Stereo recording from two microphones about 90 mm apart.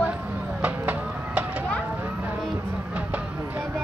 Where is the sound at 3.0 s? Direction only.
15° right (ahead or behind).